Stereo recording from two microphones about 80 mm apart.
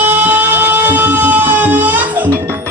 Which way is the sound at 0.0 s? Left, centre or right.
Right.